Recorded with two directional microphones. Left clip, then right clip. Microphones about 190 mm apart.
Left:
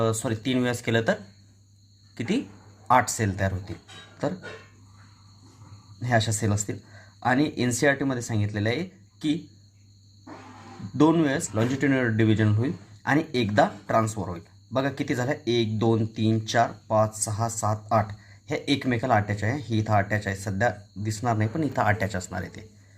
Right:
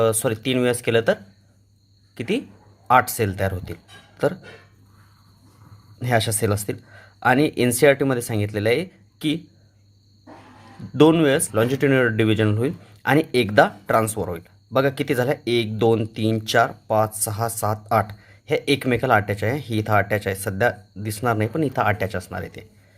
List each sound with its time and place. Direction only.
0.0 s speech: 35° right (ahead or behind)
6.0 s speech: 40° right (ahead or behind)
10.9 s speech: 40° right (ahead or behind)